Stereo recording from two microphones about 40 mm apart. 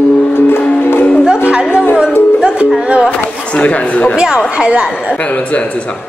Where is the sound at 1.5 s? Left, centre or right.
Right.